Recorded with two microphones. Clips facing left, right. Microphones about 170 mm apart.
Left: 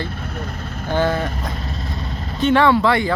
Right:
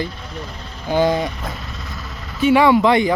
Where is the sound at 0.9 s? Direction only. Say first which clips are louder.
Right 3 dB; 15° right (ahead or behind).